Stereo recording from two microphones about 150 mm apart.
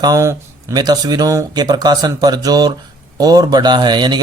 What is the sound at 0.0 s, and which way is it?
Speech, 20° right (ahead or behind).